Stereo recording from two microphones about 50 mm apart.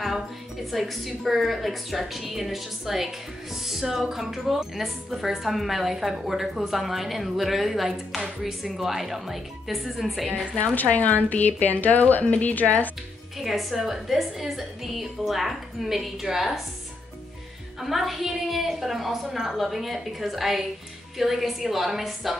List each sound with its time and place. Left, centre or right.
0.7 s speech: centre
10.6 s a woman's voice: left
13.4 s speech: centre
17.7 s speech: centre